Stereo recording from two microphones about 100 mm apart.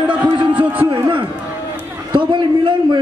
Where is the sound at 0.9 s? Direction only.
55° right (ahead or behind).